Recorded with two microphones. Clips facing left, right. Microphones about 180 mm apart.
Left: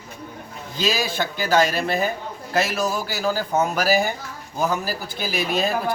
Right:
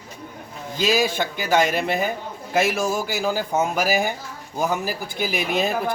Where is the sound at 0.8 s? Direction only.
15° right (ahead or behind).